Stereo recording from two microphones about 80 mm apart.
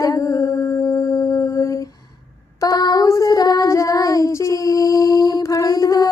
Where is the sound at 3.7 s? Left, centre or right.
Left.